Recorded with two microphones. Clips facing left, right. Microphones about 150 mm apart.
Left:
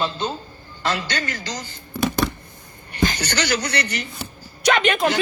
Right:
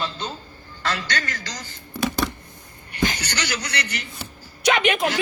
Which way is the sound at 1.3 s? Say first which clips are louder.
Left 4 dB; 30° left (ahead or behind).